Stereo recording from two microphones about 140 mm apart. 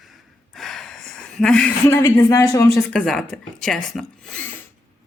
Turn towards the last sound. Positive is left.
turn(degrees=5)  # may be behind; listen again after turning